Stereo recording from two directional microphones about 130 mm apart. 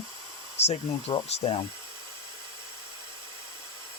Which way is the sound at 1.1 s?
40° left (ahead or behind).